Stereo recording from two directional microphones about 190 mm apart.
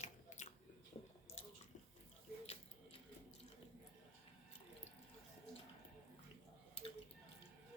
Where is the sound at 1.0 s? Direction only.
35° left (ahead or behind).